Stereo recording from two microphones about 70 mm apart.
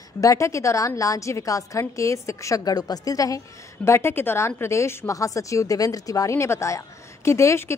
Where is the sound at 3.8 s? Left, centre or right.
Left.